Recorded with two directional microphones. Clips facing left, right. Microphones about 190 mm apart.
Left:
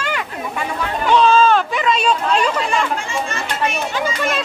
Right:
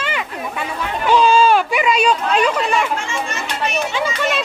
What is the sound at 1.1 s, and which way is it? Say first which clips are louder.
Speech: even; 10° right (ahead or behind).